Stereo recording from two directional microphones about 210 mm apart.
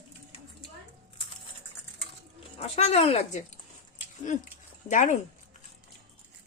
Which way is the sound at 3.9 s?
35° left (ahead or behind).